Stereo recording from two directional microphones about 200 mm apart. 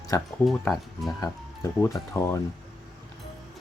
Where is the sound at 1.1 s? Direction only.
15° left (ahead or behind).